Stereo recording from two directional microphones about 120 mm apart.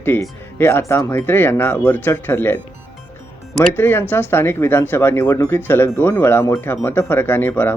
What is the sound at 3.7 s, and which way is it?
Speech, 20° left (ahead or behind).